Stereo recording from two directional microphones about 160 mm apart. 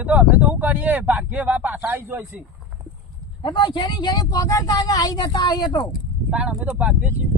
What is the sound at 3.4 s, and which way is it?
Speech, 30° left (ahead or behind).